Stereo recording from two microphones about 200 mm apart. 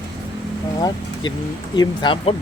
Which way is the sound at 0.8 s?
20° left (ahead or behind).